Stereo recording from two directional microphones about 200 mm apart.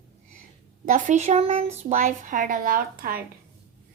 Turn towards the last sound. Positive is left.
turn(degrees=-45)  # may be behind; listen again after turning